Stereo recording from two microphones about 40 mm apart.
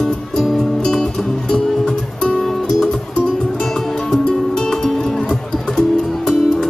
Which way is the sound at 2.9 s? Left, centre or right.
Left.